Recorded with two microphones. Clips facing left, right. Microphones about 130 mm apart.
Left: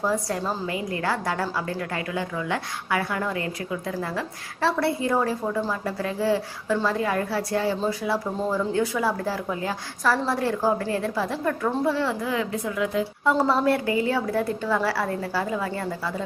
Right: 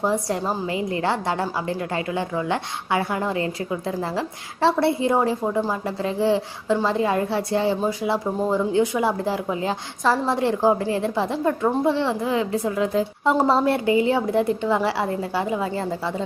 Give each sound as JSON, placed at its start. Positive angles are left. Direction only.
{"t": 0.0, "sound": "a woman's voice", "side_deg": -25}